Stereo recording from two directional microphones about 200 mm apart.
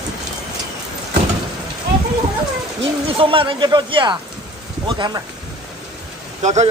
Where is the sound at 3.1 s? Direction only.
25° right (ahead or behind).